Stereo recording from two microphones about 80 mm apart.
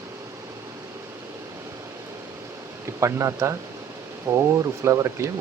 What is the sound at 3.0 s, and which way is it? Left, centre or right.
Speech, right.